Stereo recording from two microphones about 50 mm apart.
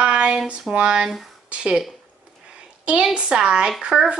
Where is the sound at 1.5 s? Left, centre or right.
Centre.